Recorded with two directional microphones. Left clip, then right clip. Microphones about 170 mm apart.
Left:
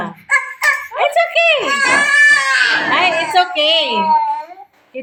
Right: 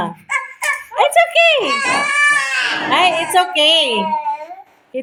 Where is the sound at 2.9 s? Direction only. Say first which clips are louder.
Even; 30° right (ahead or behind).